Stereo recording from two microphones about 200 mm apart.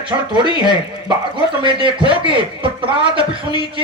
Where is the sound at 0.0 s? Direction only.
25° right (ahead or behind).